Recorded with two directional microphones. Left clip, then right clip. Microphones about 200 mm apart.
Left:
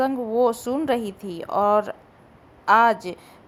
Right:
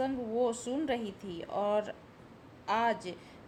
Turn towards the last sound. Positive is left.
turn(degrees=25)  # may be behind; listen again after turning